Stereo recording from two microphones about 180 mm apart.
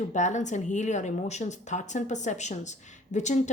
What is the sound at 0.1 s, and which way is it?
A woman's voice, 40° left (ahead or behind).